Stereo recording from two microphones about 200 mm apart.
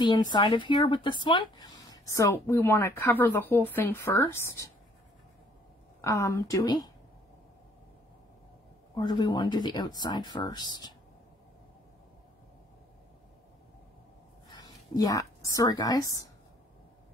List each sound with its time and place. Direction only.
0.0 s a woman's voice: 20° left (ahead or behind)
5.9 s a woman's voice: 15° left (ahead or behind)
8.9 s speech: 20° left (ahead or behind)
14.5 s a woman's voice: 20° left (ahead or behind)